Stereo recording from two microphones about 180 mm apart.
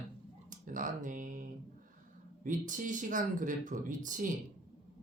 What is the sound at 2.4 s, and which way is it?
Speech, 45° right (ahead or behind).